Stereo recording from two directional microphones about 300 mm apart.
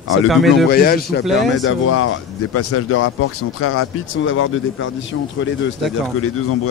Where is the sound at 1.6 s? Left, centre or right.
Left.